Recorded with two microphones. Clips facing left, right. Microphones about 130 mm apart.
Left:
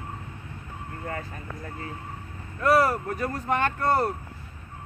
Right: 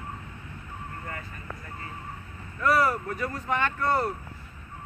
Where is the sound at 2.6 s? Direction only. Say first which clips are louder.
Left 3 dB; 40° left (ahead or behind).